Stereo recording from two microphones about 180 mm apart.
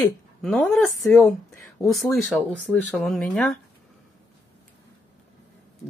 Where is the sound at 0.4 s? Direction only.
5° left (ahead or behind).